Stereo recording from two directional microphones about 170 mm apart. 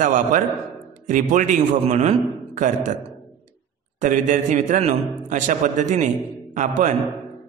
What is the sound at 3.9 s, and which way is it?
A man's voice, 45° right (ahead or behind).